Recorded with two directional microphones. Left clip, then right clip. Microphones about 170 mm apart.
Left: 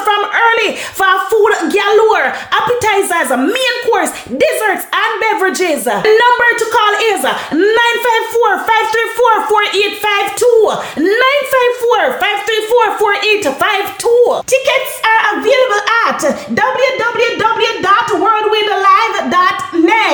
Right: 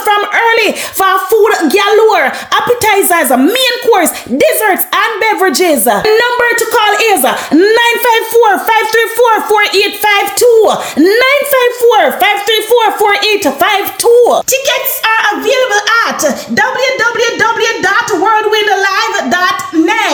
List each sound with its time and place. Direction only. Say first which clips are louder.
0.1 s speech: right 2 dB; 35° right (ahead or behind)
14.5 s a woman's voice: even; 5° right (ahead or behind)